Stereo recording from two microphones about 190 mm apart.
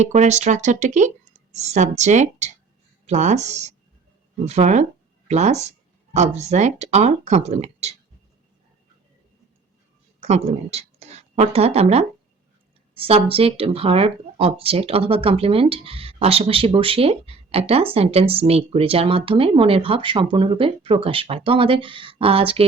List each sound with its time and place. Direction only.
0.0 s speech: 35° right (ahead or behind)
10.2 s speech: 35° right (ahead or behind)